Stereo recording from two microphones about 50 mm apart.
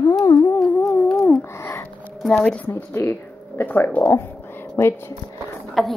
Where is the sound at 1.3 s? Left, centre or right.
Left.